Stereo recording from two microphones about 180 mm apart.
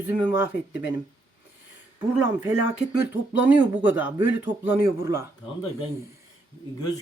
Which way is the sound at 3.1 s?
10° right (ahead or behind).